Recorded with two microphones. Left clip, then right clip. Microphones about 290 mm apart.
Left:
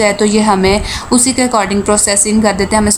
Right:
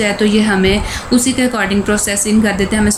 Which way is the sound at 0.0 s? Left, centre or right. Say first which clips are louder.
Left 3 dB; centre.